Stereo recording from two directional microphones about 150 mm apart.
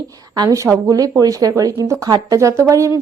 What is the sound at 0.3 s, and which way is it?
A woman's voice, 25° right (ahead or behind).